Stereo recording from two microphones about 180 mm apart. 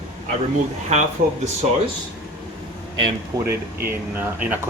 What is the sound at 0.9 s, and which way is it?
Speech, 40° right (ahead or behind).